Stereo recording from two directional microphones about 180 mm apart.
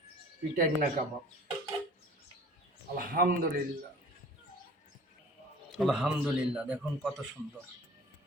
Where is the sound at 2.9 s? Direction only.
55° right (ahead or behind).